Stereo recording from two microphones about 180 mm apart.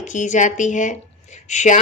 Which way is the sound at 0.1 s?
40° left (ahead or behind).